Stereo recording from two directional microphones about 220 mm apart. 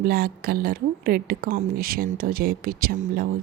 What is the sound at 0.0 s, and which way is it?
A woman's voice, 45° right (ahead or behind).